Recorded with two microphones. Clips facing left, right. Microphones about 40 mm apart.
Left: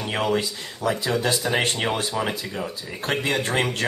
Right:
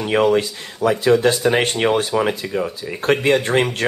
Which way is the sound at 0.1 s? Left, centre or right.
Right.